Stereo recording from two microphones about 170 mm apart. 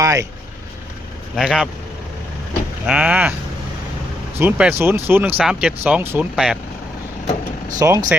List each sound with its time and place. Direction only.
0.0 s speech: 20° right (ahead or behind)
1.4 s speech: 5° right (ahead or behind)
2.8 s speech: 10° right (ahead or behind)
4.4 s speech: 10° right (ahead or behind)
7.8 s speech: 20° right (ahead or behind)